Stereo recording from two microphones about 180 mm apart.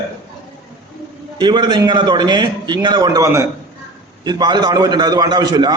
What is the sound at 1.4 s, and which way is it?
A man's voice, 25° right (ahead or behind).